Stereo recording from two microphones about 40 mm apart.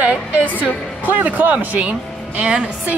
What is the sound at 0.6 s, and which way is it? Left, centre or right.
Speech, right.